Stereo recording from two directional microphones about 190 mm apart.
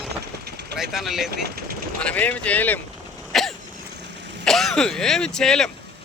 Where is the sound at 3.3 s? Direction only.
Centre (ahead or behind).